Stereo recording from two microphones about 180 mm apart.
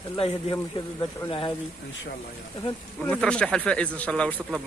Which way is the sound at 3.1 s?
5° left (ahead or behind).